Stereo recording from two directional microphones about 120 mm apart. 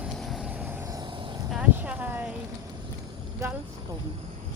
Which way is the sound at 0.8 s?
30° right (ahead or behind).